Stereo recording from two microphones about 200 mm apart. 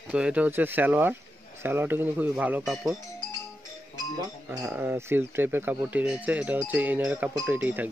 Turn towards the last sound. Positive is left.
turn(degrees=-10)  # may be behind; listen again after turning